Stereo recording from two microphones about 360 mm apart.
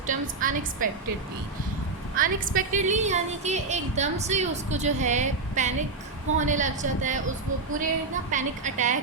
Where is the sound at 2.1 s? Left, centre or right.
Right.